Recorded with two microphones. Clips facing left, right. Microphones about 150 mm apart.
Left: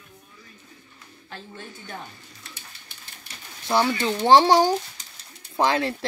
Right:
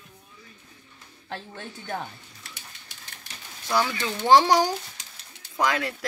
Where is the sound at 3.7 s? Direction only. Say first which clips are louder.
Left 4 dB; 30° left (ahead or behind).